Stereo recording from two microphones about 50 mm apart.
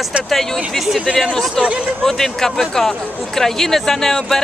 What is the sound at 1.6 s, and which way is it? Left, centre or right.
Speech, centre.